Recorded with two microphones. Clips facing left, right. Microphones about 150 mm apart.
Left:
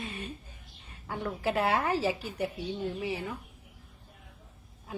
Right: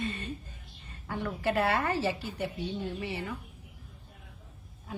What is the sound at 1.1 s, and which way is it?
A woman's voice, 10° left (ahead or behind).